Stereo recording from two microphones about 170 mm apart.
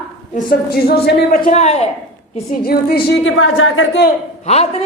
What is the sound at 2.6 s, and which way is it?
Speech, 65° left (ahead or behind).